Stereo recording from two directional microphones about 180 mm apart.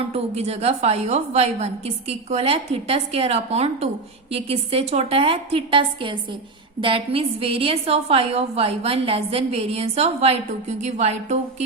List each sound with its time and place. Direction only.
0.1 s a woman's voice: 35° right (ahead or behind)